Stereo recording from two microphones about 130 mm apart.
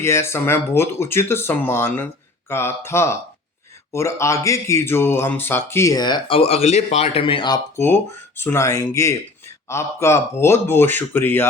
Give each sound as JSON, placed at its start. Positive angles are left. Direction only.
{"t": 0.0, "sound": "speech", "side_deg": 20}
{"t": 8.4, "sound": "speech", "side_deg": 20}